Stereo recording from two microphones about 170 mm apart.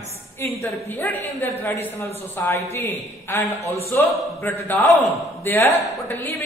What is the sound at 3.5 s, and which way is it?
Speech, 35° left (ahead or behind).